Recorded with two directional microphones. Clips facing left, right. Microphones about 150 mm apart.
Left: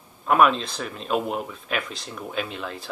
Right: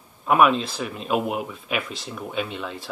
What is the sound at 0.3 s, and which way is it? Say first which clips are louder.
Speech: right 1 dB; 5° right (ahead or behind).